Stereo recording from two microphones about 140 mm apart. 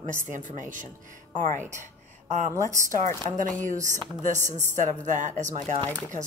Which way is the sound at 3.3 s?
65° right (ahead or behind).